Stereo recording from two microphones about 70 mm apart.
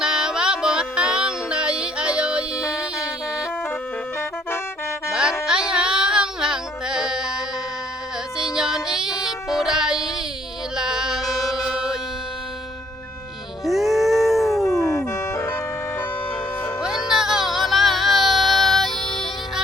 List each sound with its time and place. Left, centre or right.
0.0 s music: centre
5.5 s music: centre
13.7 s howl: centre
14.8 s music: left
16.8 s music: centre